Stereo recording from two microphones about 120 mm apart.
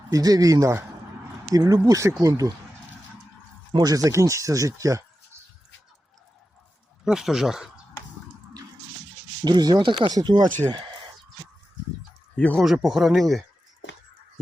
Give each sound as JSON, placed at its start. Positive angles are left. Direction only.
{"t": 0.1, "sound": "speech", "side_deg": -30}
{"t": 3.7, "sound": "speech", "side_deg": -35}
{"t": 7.0, "sound": "speech", "side_deg": -5}
{"t": 9.4, "sound": "speech", "side_deg": -35}
{"t": 12.4, "sound": "speech", "side_deg": 10}
{"t": 12.6, "sound": "speech", "side_deg": 0}